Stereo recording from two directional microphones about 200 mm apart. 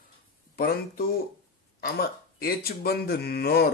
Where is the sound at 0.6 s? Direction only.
50° left (ahead or behind).